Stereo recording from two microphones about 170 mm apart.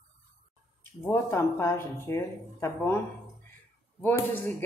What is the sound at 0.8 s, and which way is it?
A woman's voice, 15° left (ahead or behind).